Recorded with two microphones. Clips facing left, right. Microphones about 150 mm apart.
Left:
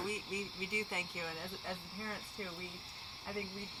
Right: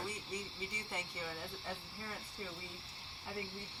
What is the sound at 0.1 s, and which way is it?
Cricket, 5° left (ahead or behind).